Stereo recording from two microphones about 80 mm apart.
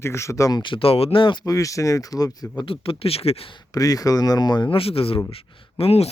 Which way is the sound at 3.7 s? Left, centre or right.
Left.